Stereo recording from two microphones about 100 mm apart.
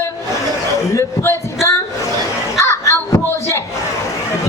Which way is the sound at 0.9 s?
30° left (ahead or behind).